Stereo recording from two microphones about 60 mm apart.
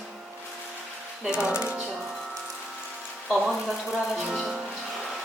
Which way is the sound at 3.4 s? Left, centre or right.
Centre.